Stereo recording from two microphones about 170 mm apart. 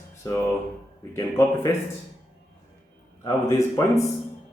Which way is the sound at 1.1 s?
15° left (ahead or behind).